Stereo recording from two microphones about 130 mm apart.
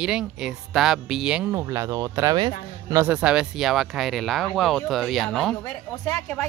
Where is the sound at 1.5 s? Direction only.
25° right (ahead or behind).